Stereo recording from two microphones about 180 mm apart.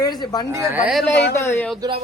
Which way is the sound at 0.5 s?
15° right (ahead or behind).